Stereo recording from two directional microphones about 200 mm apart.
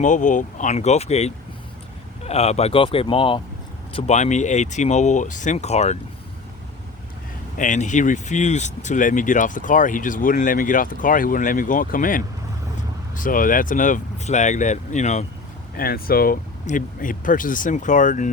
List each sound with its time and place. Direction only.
0.0 s speech: 40° left (ahead or behind)
7.6 s speech: 40° left (ahead or behind)
15.7 s speech: 50° left (ahead or behind)